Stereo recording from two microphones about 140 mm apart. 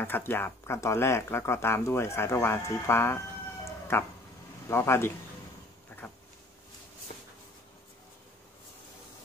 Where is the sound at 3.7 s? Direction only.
15° left (ahead or behind).